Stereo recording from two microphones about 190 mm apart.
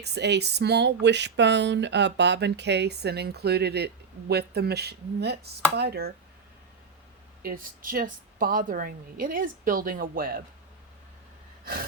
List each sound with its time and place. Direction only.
0.0 s speech: 60° right (ahead or behind)
7.4 s a woman's voice: 45° right (ahead or behind)
11.6 s gasp: 50° right (ahead or behind)